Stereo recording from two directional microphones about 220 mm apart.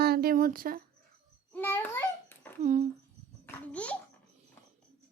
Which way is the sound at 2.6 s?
30° right (ahead or behind).